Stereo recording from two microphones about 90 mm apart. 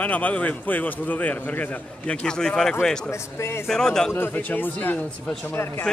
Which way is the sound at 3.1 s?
30° left (ahead or behind).